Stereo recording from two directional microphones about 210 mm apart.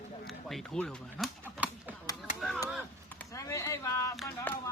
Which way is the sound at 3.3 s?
15° left (ahead or behind).